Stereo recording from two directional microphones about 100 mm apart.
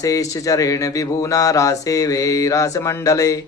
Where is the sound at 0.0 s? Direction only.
35° left (ahead or behind).